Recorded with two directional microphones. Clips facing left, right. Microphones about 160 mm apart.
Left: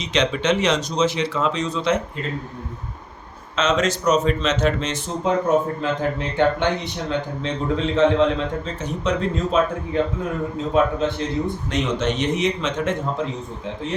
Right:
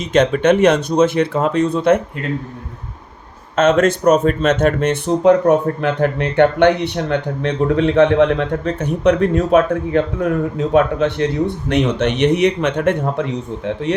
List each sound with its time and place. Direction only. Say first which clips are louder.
0.0 s speech: right 7 dB; 50° right (ahead or behind)
3.5 s speech: right 7 dB; 55° right (ahead or behind)